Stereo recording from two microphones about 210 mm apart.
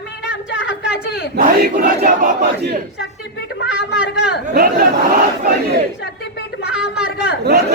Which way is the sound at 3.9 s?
5° right (ahead or behind).